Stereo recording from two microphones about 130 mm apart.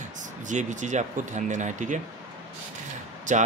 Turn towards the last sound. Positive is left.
turn(degrees=-75)  # may be behind; listen again after turning